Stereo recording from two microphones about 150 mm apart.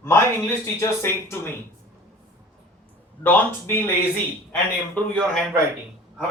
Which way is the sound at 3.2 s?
15° left (ahead or behind).